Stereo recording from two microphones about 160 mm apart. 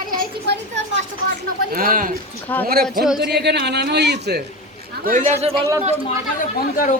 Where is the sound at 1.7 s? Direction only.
60° right (ahead or behind).